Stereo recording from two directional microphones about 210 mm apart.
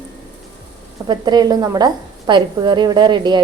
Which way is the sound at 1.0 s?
20° right (ahead or behind).